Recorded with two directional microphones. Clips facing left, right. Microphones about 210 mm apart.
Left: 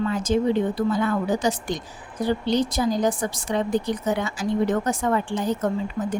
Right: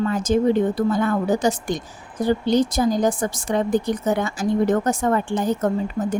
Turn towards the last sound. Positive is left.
turn(degrees=-50)  # may be behind; listen again after turning